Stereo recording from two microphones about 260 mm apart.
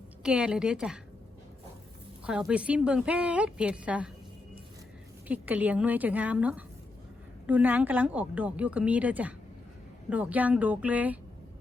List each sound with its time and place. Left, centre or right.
0.2 s speech: centre
2.2 s speech: centre
5.3 s speech: centre